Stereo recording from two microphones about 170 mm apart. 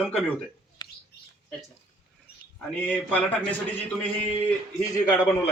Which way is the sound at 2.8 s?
10° left (ahead or behind).